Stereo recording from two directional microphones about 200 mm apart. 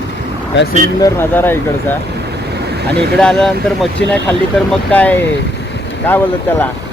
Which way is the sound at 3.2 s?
5° left (ahead or behind).